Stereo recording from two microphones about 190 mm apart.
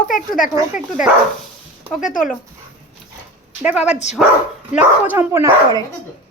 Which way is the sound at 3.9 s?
35° left (ahead or behind).